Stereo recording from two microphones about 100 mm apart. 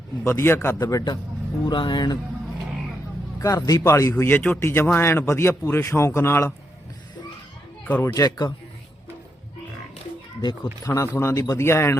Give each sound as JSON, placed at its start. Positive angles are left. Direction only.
{"t": 0.3, "sound": "speech", "side_deg": 25}
{"t": 0.8, "sound": "speech", "side_deg": 40}
{"t": 1.6, "sound": "speech", "side_deg": 50}
{"t": 3.3, "sound": "speech", "side_deg": 35}
{"t": 4.2, "sound": "a man's voice", "side_deg": 20}
{"t": 7.9, "sound": "a man's voice", "side_deg": 15}
{"t": 8.1, "sound": "speech", "side_deg": 40}
{"t": 10.8, "sound": "speech", "side_deg": 35}